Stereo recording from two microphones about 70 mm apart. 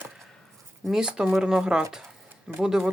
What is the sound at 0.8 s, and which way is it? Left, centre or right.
Speech, centre.